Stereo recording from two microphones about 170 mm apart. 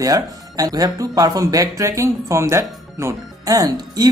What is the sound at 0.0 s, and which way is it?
Speech, 20° right (ahead or behind).